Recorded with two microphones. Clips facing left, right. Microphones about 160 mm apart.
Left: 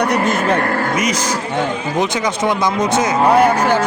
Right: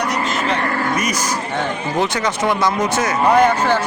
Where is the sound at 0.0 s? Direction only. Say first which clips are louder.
Left 5 dB; 55° left (ahead or behind).